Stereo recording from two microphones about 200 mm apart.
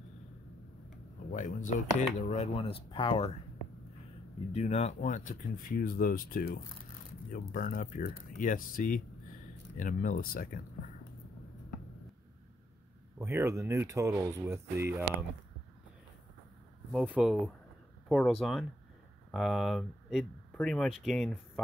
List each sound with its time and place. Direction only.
1.3 s speech: 35° left (ahead or behind)
4.5 s speech: 30° left (ahead or behind)
13.2 s speech: 15° right (ahead or behind)
17.0 s speech: 5° right (ahead or behind)